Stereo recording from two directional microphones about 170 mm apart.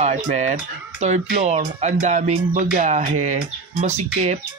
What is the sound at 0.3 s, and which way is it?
Speech, 45° right (ahead or behind).